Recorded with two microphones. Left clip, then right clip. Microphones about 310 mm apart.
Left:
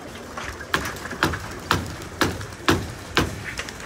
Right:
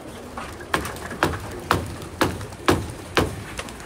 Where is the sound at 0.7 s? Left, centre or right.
Right.